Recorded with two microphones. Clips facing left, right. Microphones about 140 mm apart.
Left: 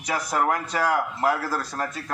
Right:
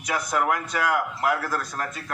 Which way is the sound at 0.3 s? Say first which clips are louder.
Left 1 dB; 30° left (ahead or behind).